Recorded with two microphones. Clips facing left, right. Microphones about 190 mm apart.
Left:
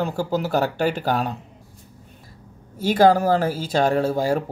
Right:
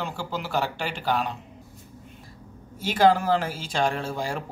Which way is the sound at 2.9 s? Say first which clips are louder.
Left 4 dB; 40° left (ahead or behind).